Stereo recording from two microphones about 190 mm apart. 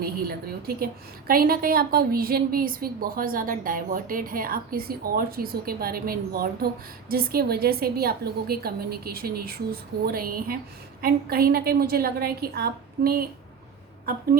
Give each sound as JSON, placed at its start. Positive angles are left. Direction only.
{"t": 0.0, "sound": "a woman's voice", "side_deg": -50}